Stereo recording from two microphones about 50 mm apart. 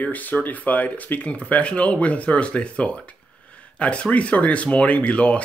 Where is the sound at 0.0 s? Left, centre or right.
Left.